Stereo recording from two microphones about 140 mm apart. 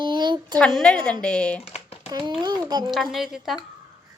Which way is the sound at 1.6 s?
45° left (ahead or behind).